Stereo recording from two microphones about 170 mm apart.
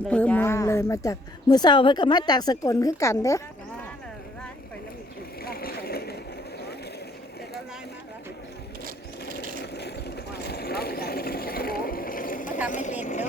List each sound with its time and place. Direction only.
0.1 s a woman's voice: 10° left (ahead or behind)
5.4 s boat: 60° left (ahead or behind)
9.6 s vehicle: 75° left (ahead or behind); by 12.5 s 50° left (ahead or behind)
12.6 s speech: 45° left (ahead or behind)